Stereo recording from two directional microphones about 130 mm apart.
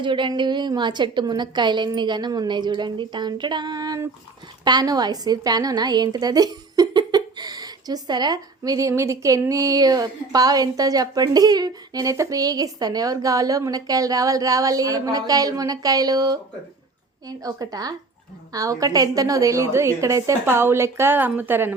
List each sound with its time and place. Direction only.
0.0 s a woman's voice: 40° right (ahead or behind); by 21.8 s 15° right (ahead or behind)